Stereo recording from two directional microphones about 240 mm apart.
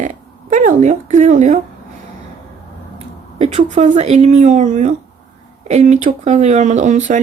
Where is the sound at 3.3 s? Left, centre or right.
Right.